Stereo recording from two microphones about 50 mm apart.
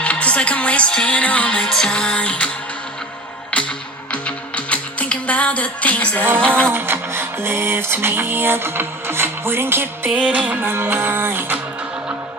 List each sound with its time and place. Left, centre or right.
0.0 s music: left
3.5 s music: left
6.7 s music: right
10.2 s music: right
10.7 s music: right